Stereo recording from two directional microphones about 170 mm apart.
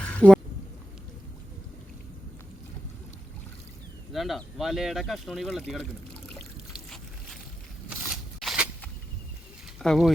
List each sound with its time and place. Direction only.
0.2 s speech: centre (ahead or behind)
4.1 s speech: centre (ahead or behind)
7.9 s a sound: centre (ahead or behind)
9.7 s speech: centre (ahead or behind)